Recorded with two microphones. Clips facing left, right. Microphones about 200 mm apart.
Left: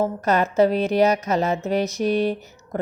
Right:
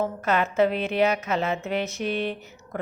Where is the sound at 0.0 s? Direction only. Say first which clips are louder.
Left 4 dB; 40° left (ahead or behind).